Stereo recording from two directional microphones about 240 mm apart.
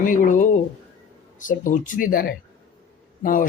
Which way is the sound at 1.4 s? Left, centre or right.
Left.